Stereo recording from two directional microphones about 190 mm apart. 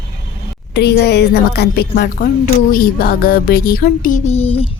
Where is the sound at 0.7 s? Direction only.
60° left (ahead or behind).